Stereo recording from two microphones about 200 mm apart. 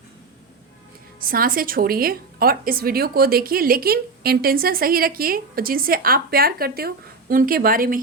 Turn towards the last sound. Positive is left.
turn(degrees=-45)  # may be behind; listen again after turning